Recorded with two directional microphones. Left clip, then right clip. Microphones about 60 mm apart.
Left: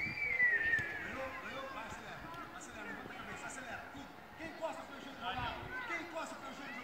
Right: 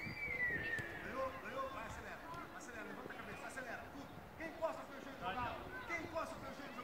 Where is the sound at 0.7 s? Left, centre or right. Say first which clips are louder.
Left 8 dB; centre.